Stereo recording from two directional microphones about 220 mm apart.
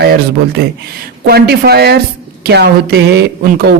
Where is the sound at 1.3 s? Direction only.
45° right (ahead or behind).